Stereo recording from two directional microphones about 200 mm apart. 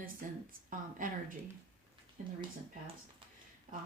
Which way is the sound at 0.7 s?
40° right (ahead or behind).